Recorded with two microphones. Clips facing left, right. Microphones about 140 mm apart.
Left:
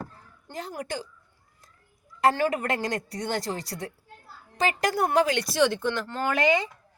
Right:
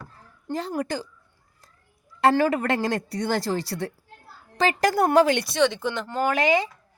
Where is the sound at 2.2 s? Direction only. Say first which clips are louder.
Right 3 dB; 35° right (ahead or behind).